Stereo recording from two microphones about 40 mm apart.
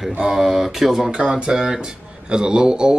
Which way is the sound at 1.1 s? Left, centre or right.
Right.